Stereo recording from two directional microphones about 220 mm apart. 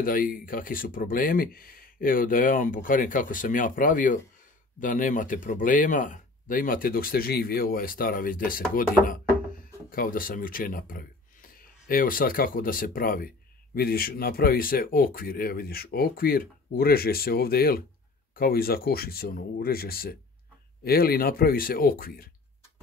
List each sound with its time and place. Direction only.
0.0 s speech: 40° left (ahead or behind)